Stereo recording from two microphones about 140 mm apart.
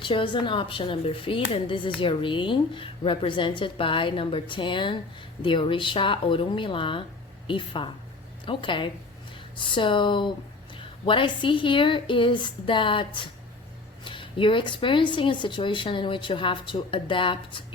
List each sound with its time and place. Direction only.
0.0 s a woman's voice: 35° left (ahead or behind)